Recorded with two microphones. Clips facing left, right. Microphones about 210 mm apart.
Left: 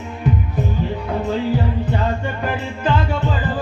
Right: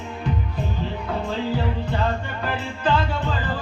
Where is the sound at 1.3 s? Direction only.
15° left (ahead or behind).